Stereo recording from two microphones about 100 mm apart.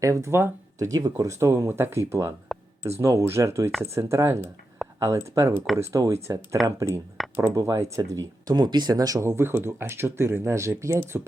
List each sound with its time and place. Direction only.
0.0 s speech: 30° right (ahead or behind)
0.9 s speech: 35° right (ahead or behind)
8.4 s speech: 45° right (ahead or behind); by 11.3 s 25° right (ahead or behind)